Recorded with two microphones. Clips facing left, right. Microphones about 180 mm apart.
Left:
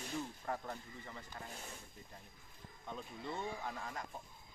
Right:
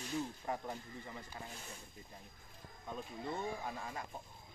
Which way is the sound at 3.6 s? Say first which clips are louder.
Right 1 dB; 10° right (ahead or behind).